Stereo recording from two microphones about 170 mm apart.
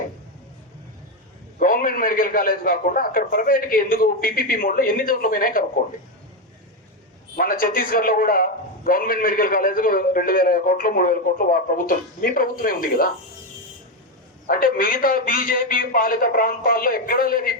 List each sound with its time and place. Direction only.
1.5 s a man's voice: 55° left (ahead or behind)
7.3 s a man's voice: 55° left (ahead or behind)
14.4 s a man's voice: 60° left (ahead or behind)